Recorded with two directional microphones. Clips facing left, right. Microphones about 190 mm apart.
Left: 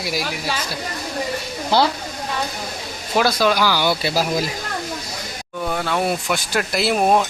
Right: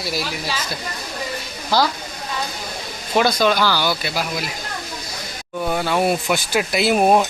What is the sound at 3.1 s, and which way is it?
Speech, 5° left (ahead or behind).